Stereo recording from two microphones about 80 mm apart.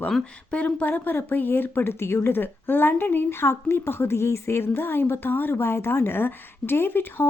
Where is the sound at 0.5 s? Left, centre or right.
Centre.